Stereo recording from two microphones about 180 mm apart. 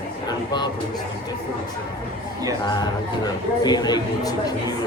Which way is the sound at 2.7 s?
20° left (ahead or behind).